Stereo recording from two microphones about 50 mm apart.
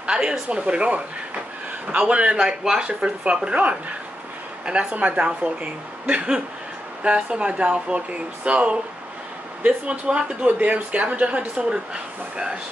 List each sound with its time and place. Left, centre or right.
0.0 s speech: centre